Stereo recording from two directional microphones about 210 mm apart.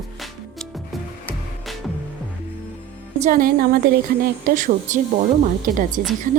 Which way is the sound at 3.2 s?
40° right (ahead or behind).